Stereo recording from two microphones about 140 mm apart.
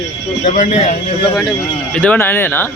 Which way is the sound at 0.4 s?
65° left (ahead or behind).